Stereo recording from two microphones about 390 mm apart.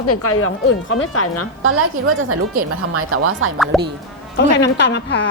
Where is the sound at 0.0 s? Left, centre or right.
Left.